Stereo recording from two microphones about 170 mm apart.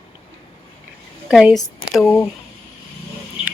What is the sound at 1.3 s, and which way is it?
Speech, centre (ahead or behind).